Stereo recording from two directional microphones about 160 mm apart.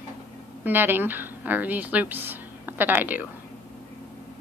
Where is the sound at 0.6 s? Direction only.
10° right (ahead or behind).